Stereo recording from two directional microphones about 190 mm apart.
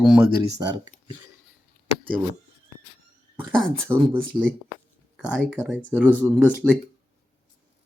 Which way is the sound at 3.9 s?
15° right (ahead or behind).